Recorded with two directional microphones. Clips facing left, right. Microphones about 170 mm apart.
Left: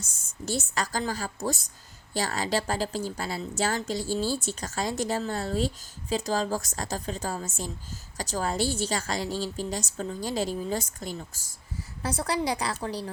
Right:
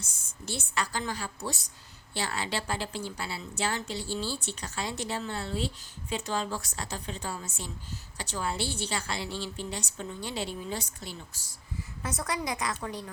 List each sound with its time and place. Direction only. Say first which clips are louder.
0.0 s a woman's voice: left 6 dB; 45° left (ahead or behind)
11.8 s a woman's voice: left 5 dB; 30° left (ahead or behind)